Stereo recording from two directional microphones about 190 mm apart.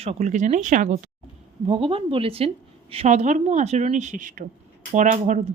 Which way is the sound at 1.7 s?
30° right (ahead or behind).